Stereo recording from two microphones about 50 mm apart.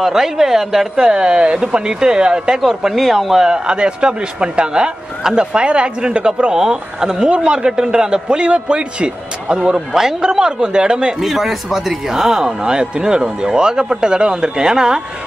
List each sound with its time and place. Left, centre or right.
0.0 s speech: centre
3.4 s speech: centre
11.1 s speech: centre